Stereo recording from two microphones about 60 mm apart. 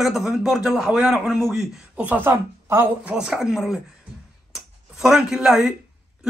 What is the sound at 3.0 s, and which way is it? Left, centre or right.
Speech, centre.